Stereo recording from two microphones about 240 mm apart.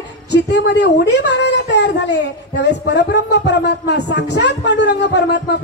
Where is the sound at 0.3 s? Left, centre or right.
Left.